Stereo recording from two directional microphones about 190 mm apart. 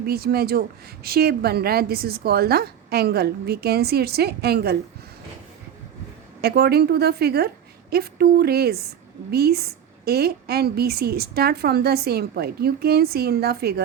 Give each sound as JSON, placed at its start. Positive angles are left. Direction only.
{"t": 0.0, "sound": "a woman's voice", "side_deg": -55}
{"t": 6.4, "sound": "a woman's voice", "side_deg": -55}